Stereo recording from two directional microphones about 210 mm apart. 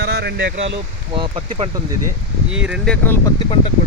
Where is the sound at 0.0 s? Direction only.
50° right (ahead or behind).